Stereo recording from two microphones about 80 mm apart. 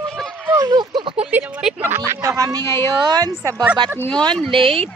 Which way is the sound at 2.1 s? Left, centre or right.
Right.